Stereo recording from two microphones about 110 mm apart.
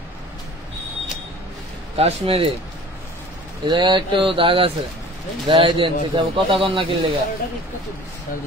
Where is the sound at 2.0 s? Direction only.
65° right (ahead or behind).